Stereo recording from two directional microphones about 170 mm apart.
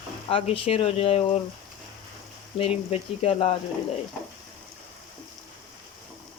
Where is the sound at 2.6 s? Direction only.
35° left (ahead or behind).